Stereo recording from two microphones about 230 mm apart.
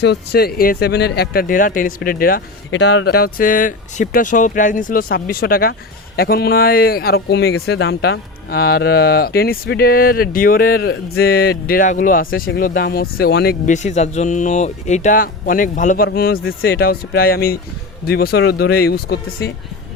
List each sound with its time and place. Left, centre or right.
0.0 s speech: left
2.6 s speech: left